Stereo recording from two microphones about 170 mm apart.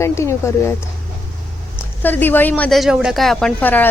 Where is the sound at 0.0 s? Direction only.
15° left (ahead or behind).